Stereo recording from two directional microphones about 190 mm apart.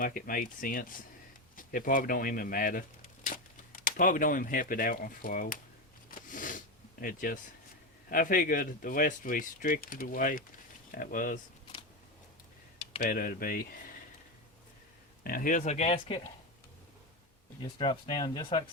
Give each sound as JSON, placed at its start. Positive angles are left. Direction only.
{"t": 0.0, "sound": "speech", "side_deg": 45}
{"t": 6.1, "sound": "a sound", "side_deg": 45}
{"t": 7.0, "sound": "speech", "side_deg": 45}
{"t": 13.0, "sound": "speech", "side_deg": 50}
{"t": 15.2, "sound": "speech", "side_deg": 50}
{"t": 17.6, "sound": "speech", "side_deg": 25}